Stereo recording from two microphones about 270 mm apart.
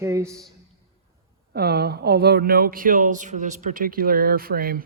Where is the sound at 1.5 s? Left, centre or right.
Right.